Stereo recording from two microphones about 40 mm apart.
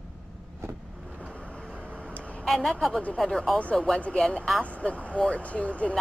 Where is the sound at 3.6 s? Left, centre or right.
Left.